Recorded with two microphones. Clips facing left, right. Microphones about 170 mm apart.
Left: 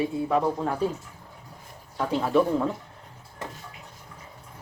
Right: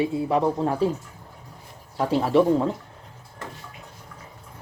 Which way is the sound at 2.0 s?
30° right (ahead or behind).